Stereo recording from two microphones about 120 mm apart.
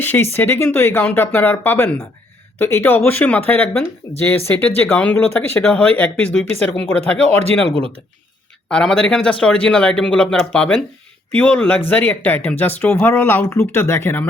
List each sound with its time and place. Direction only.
0.0 s speech: 15° left (ahead or behind)
8.7 s speech: 5° left (ahead or behind)